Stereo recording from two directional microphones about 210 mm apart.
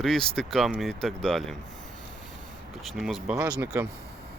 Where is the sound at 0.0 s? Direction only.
Centre (ahead or behind).